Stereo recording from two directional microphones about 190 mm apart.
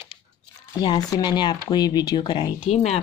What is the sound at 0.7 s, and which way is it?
Speech, 20° left (ahead or behind).